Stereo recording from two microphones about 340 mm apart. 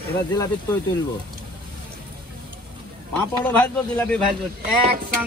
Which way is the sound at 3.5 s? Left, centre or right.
Centre.